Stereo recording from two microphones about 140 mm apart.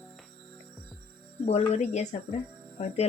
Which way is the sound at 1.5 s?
50° left (ahead or behind).